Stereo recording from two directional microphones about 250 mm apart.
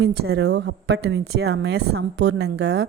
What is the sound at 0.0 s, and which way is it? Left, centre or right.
A woman's voice, right.